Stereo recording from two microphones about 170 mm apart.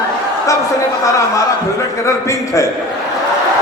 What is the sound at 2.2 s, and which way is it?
Speech, 20° left (ahead or behind).